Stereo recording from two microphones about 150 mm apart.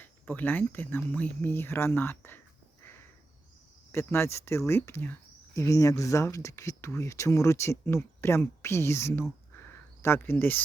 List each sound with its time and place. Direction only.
0.0 s speech: 10° left (ahead or behind)
3.9 s speech: 15° left (ahead or behind)